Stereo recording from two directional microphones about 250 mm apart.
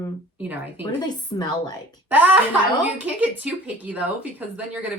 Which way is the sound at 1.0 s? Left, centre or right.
Centre.